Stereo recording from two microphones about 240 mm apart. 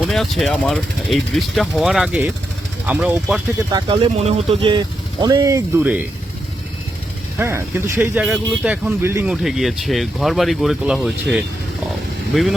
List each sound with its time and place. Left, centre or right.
0.1 s speech: centre
3.7 s speech: centre
7.3 s speech: centre